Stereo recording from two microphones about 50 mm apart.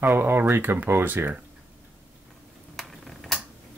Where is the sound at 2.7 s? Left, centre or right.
Centre.